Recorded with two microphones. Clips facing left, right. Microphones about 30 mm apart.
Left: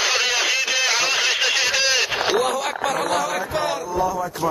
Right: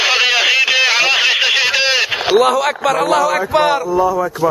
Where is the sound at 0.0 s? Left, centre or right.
Right.